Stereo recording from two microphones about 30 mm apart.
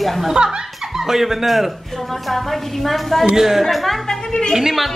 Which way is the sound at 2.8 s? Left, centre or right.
Centre.